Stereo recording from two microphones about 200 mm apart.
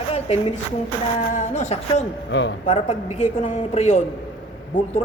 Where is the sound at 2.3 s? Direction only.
65° left (ahead or behind).